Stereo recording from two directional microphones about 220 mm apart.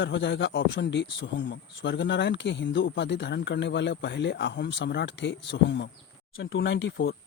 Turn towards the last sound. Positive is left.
turn(degrees=60)  # may be behind; listen again after turning